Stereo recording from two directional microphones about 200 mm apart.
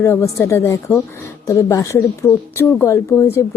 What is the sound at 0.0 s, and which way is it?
Speech, 15° left (ahead or behind).